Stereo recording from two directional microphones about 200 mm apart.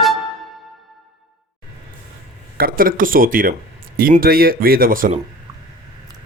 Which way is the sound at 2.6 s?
45° right (ahead or behind).